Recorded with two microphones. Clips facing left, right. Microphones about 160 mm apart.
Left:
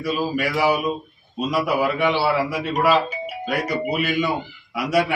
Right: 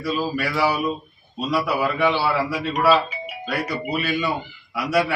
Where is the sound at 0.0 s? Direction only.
15° left (ahead or behind).